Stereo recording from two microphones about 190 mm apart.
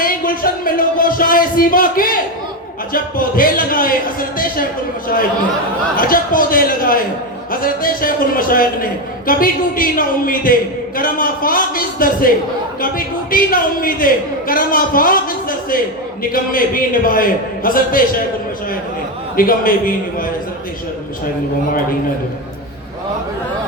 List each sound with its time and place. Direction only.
0.0 s a man's voice: 50° left (ahead or behind)
6.0 s a man's voice: 50° left (ahead or behind)
19.4 s a man's voice: 50° left (ahead or behind)